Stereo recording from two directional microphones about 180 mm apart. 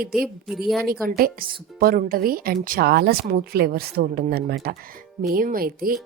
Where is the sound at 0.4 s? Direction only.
Centre (ahead or behind).